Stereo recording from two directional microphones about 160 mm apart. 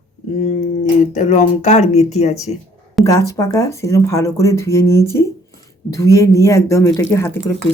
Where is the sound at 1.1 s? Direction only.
50° left (ahead or behind).